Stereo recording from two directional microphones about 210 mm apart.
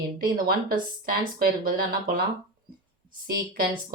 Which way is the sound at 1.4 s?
45° right (ahead or behind).